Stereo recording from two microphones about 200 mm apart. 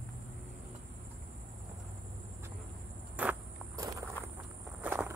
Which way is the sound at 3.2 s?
5° right (ahead or behind).